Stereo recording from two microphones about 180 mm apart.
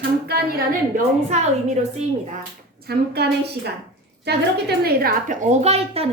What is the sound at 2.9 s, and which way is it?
A woman's voice, 65° right (ahead or behind).